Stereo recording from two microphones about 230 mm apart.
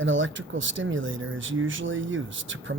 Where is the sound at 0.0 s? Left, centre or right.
Right.